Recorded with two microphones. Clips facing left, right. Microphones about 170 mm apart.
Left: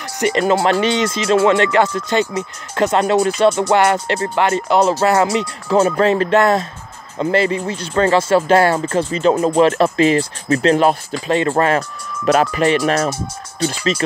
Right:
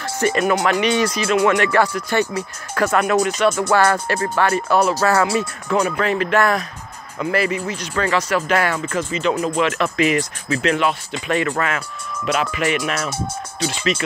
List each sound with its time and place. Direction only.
0.2 s speech: 25° left (ahead or behind); by 11.1 s 40° left (ahead or behind)
11.2 s speech: 30° left (ahead or behind)